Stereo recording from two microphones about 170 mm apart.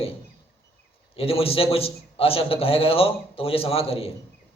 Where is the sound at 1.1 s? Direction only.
35° left (ahead or behind).